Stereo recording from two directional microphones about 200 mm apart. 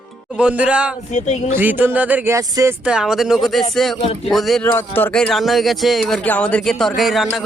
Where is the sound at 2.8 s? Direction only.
5° right (ahead or behind).